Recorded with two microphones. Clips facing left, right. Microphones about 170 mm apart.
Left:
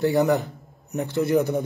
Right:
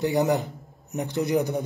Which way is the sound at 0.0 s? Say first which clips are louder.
Left 3 dB; 20° right (ahead or behind).